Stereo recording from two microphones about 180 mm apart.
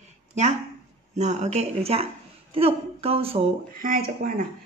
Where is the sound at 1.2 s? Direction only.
40° right (ahead or behind).